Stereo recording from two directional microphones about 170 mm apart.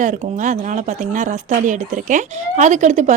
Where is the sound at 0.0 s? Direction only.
45° right (ahead or behind).